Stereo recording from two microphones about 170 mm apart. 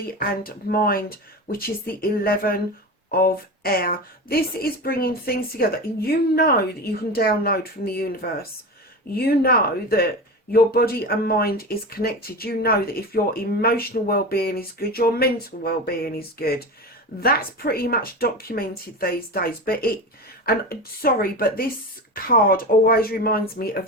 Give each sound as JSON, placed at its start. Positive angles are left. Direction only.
{"t": 0.2, "sound": "speech", "side_deg": 60}